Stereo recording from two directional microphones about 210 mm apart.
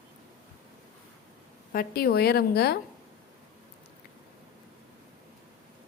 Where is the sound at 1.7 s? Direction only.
45° left (ahead or behind).